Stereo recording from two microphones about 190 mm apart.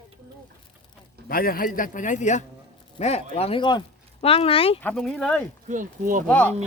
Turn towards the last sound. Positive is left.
turn(degrees=10)  # may be behind; listen again after turning